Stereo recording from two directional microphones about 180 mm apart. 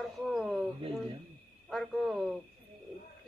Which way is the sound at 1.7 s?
Centre (ahead or behind).